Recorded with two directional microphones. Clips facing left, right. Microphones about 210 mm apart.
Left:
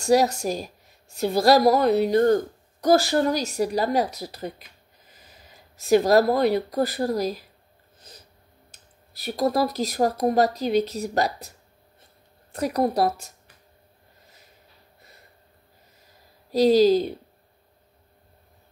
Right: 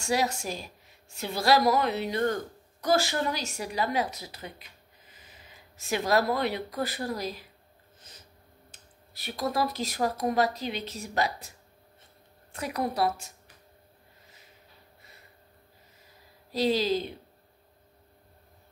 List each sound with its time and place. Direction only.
0.0 s a woman's voice: 40° left (ahead or behind)
5.8 s a woman's voice: 40° left (ahead or behind)
8.7 s a woman's voice: 40° left (ahead or behind)
12.5 s a woman's voice: 40° left (ahead or behind)
16.5 s a woman's voice: 40° left (ahead or behind)